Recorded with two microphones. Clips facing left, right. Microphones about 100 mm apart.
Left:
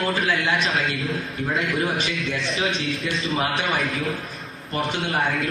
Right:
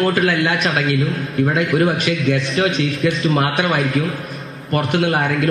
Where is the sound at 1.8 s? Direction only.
65° right (ahead or behind).